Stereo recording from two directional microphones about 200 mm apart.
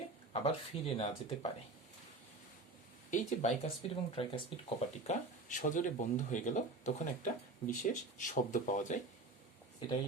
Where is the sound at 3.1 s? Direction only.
35° left (ahead or behind).